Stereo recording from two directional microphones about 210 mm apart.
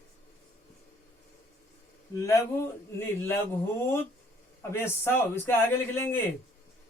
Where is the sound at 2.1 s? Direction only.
15° left (ahead or behind).